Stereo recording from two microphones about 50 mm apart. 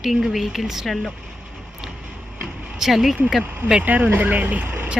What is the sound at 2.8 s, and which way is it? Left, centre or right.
Speech, centre.